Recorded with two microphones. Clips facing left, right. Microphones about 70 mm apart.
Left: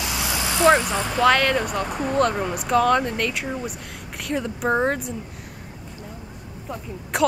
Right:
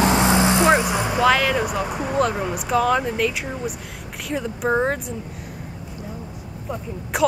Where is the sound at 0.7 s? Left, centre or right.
Centre.